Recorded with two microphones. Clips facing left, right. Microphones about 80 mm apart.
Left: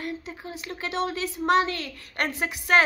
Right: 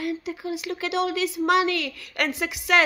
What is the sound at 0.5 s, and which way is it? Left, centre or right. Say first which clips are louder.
A woman's voice: right 5 dB; left.